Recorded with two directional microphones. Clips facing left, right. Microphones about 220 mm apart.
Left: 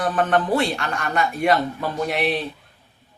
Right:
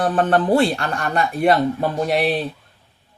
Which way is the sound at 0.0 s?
35° right (ahead or behind).